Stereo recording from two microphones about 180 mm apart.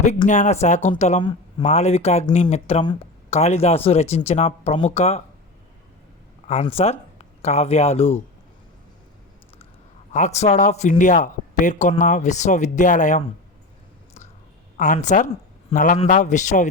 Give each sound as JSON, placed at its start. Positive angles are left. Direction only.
{"t": 0.3, "sound": "speech", "side_deg": 40}
{"t": 1.2, "sound": "speech", "side_deg": 25}
{"t": 1.6, "sound": "speech", "side_deg": 40}
{"t": 6.5, "sound": "speech", "side_deg": 35}
{"t": 10.1, "sound": "speech", "side_deg": 40}
{"t": 14.9, "sound": "speech", "side_deg": 40}